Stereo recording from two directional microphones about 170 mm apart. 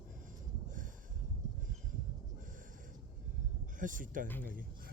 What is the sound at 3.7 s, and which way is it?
Speech, 50° right (ahead or behind).